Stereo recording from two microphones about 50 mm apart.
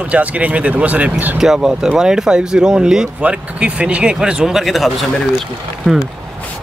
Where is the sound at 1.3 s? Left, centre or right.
Centre.